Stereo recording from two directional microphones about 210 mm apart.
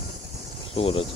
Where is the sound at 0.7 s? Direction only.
25° left (ahead or behind).